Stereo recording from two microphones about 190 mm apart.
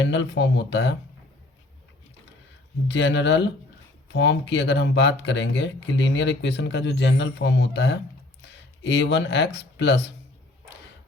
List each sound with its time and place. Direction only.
0.0 s speech: 70° left (ahead or behind)
2.8 s speech: 65° left (ahead or behind)